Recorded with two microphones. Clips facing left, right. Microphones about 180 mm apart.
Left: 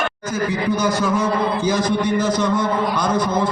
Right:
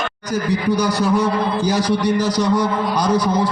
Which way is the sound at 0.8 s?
35° right (ahead or behind).